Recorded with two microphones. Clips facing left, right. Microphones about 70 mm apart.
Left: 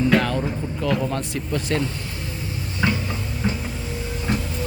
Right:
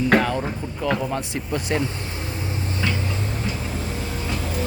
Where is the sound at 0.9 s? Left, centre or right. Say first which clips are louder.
Left 1 dB; centre.